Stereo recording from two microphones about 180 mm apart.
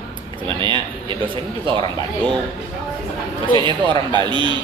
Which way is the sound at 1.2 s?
30° right (ahead or behind).